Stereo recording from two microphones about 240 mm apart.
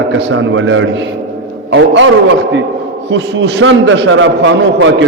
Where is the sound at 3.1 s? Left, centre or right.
Right.